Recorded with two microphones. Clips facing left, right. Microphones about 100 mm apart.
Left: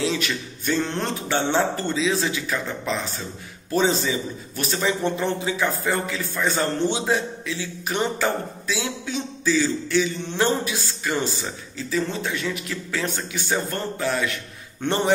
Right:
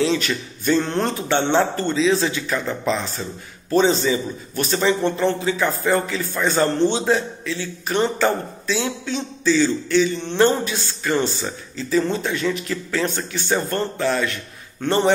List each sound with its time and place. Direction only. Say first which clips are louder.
0.0 s a man's voice: right 4 dB; 5° left (ahead or behind)
5.9 s a man's voice: right 5 dB; centre (ahead or behind)
14.8 s a man's voice: right 3 dB; 20° left (ahead or behind)